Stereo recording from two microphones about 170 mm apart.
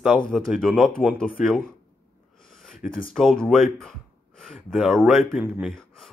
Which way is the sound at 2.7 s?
50° left (ahead or behind).